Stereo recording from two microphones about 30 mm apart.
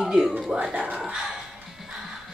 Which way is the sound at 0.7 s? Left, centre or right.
Right.